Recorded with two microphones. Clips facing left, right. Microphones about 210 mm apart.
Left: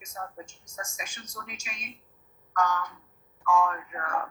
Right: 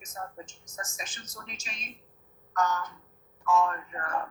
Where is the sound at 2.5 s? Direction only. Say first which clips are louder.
Left 1 dB; 10° left (ahead or behind).